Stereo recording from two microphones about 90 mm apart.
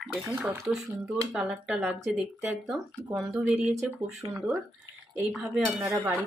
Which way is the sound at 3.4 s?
10° right (ahead or behind).